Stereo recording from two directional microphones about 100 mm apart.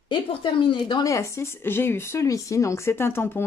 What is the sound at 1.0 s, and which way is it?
Speech, 30° left (ahead or behind).